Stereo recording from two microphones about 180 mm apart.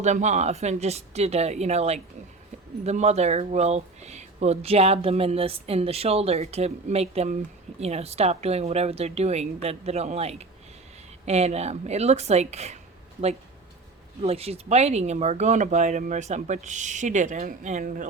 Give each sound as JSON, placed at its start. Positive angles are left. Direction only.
{"t": 0.0, "sound": "speech", "side_deg": -40}
{"t": 14.2, "sound": "speech", "side_deg": -35}